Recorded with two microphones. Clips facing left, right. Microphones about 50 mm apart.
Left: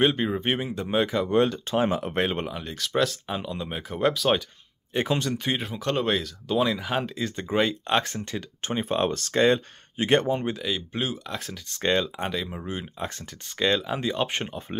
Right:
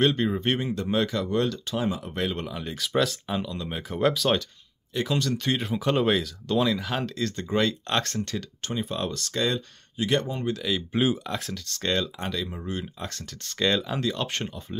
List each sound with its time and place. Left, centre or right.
0.0 s speech: centre; by 1.9 s left
1.9 s speech: left
2.2 s speech: left
2.6 s speech: centre
3.4 s speech: left
3.7 s speech: centre
4.9 s speech: left
5.3 s speech: centre
5.7 s speech: centre
8.6 s speech: left
10.5 s speech: centre
10.9 s speech: centre
11.5 s speech: centre
13.9 s speech: centre